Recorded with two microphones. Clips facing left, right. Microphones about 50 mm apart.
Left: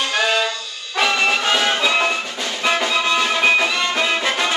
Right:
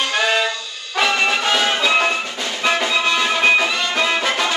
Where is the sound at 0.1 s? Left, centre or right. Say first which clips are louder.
Even; centre.